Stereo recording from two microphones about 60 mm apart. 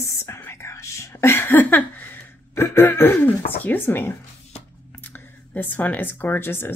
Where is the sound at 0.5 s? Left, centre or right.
Left.